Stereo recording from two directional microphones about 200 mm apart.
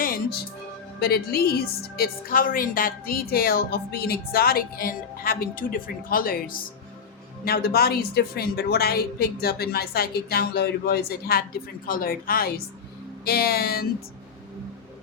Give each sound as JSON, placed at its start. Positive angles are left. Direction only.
{"t": 0.0, "sound": "music", "side_deg": 45}
{"t": 0.9, "sound": "speech", "side_deg": 50}